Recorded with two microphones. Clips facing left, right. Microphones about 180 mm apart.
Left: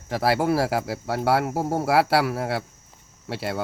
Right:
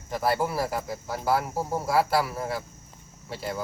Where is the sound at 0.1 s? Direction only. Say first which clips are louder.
Left 5 dB; 80° left.